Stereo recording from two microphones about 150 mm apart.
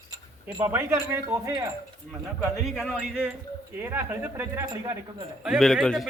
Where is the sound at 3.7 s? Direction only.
15° right (ahead or behind).